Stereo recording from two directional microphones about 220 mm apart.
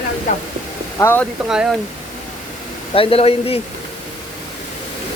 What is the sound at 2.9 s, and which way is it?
Speech, 25° left (ahead or behind).